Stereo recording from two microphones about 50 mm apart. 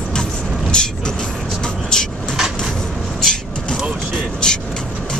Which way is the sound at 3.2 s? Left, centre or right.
Centre.